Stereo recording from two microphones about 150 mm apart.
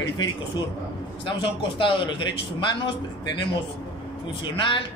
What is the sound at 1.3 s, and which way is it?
A man's voice, 35° left (ahead or behind).